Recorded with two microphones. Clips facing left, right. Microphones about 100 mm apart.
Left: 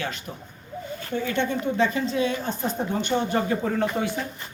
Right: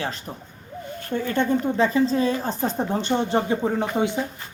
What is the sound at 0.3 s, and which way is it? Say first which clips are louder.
A woman's voice: right 1 dB; 35° right (ahead or behind).